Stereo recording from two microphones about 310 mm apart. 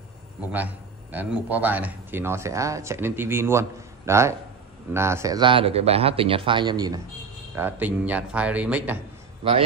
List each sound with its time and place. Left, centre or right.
0.5 s a man's voice: centre